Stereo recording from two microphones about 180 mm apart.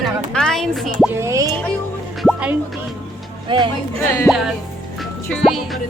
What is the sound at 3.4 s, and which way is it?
Speech, 25° right (ahead or behind).